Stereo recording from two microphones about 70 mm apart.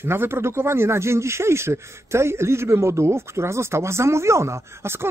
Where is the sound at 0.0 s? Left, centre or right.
Right.